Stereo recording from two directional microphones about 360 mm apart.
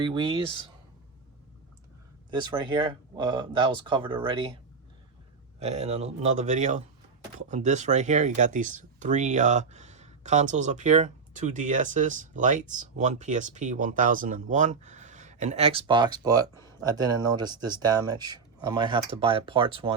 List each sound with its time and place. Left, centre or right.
0.0 s speech: centre
2.3 s speech: centre
5.5 s speech: centre